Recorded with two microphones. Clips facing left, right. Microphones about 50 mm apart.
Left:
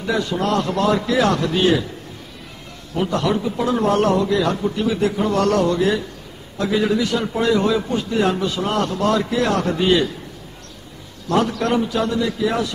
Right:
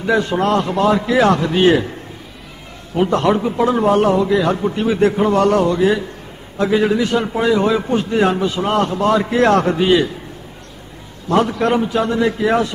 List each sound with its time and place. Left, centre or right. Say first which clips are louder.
0.0 s a man's voice: right 5 dB; right
3.1 s a man's voice: right 4 dB; right
9.3 s a man's voice: right 6 dB; right
9.8 s a man's voice: right 3 dB; centre
11.2 s a man's voice: right 3 dB; centre